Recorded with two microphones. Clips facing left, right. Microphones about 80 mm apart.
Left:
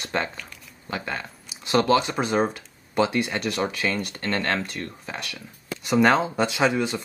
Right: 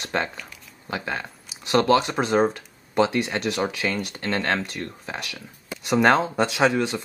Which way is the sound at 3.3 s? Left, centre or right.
Centre.